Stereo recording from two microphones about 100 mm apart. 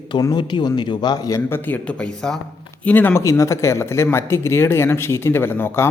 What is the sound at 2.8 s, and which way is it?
Speech, 20° left (ahead or behind).